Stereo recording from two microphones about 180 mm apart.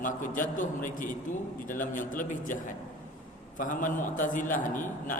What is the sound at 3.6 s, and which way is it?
A man's voice, 45° left (ahead or behind).